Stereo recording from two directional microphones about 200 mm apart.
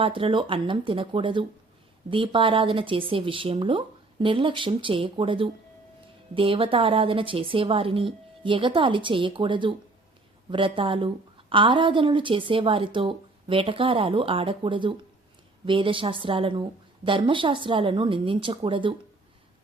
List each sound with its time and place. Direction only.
0.0 s a woman's voice: 25° right (ahead or behind)